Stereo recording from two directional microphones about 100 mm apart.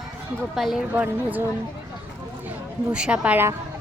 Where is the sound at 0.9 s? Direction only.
15° right (ahead or behind).